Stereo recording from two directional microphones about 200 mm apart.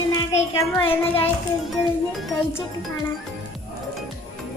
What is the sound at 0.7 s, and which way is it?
Music, 30° left (ahead or behind).